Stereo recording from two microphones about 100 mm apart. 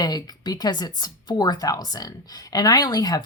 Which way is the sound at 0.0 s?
40° left (ahead or behind).